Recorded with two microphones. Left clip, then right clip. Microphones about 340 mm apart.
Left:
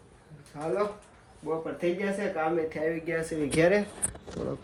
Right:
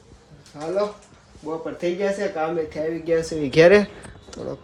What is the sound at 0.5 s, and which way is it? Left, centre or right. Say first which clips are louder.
Speech: right 3 dB; centre.